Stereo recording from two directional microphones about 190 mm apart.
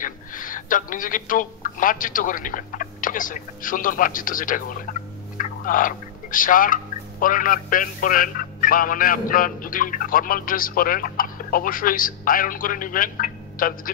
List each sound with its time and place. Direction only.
0.0 s a woman's voice: 45° left (ahead or behind)
4.9 s fowl: 50° left (ahead or behind)
5.4 s speech: 45° left (ahead or behind)